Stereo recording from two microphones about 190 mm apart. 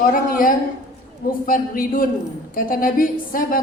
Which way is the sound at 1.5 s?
45° left (ahead or behind).